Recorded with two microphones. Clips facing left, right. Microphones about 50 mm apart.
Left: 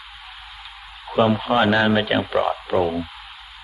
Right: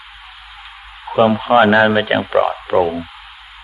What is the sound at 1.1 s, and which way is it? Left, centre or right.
Radio, centre.